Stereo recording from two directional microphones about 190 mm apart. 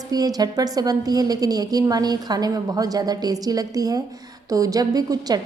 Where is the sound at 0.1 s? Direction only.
20° right (ahead or behind).